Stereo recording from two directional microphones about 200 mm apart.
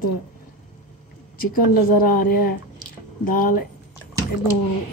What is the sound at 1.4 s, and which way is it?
A woman's voice, 45° left (ahead or behind).